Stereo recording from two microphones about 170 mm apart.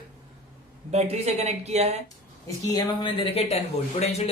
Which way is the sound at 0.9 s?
40° right (ahead or behind).